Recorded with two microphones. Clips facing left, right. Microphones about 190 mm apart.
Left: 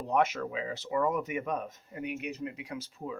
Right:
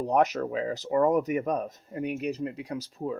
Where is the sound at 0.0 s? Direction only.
40° right (ahead or behind).